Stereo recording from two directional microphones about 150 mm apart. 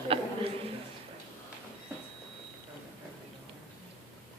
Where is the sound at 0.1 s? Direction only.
40° right (ahead or behind).